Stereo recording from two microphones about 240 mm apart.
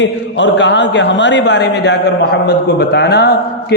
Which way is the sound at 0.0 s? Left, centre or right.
Left.